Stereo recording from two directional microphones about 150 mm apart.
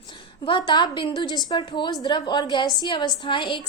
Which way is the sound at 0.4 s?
35° left (ahead or behind).